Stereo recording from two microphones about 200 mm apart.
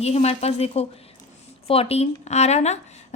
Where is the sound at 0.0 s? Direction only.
30° left (ahead or behind).